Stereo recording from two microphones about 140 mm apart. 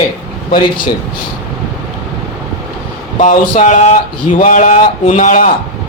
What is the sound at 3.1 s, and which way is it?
Speech, 60° left (ahead or behind).